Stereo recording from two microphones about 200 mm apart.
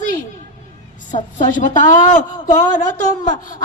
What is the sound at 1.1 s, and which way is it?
A woman's voice, 40° left (ahead or behind).